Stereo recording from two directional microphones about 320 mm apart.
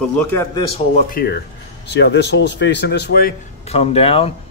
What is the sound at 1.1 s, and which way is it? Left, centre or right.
Speech, left.